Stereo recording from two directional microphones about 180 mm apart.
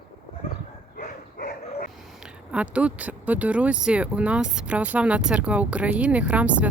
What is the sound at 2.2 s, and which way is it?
Speech, 5° right (ahead or behind).